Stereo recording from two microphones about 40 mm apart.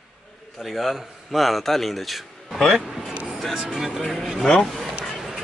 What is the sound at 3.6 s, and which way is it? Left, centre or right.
Speech, centre.